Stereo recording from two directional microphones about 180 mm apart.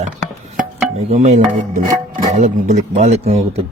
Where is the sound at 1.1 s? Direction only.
40° right (ahead or behind).